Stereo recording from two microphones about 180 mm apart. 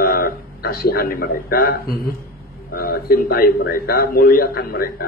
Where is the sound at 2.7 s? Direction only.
55° left (ahead or behind).